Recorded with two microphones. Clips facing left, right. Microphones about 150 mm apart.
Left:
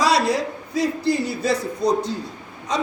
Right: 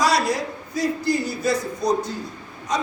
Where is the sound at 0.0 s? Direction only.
30° left (ahead or behind).